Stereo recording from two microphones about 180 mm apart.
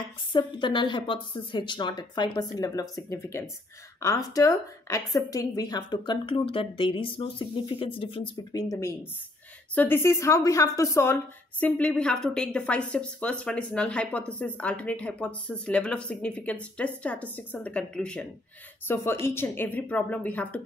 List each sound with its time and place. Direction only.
0.3 s a woman's voice: 25° left (ahead or behind)
11.6 s a woman's voice: 5° left (ahead or behind)